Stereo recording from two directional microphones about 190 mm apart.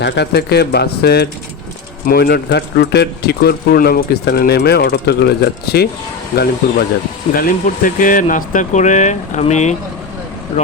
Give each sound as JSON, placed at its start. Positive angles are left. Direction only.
{"t": 0.0, "sound": "a man's voice", "side_deg": 60}
{"t": 7.3, "sound": "speech", "side_deg": 45}